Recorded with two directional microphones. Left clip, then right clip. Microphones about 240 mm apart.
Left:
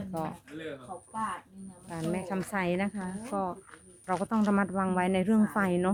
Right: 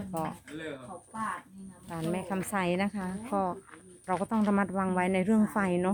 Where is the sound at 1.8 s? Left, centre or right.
Centre.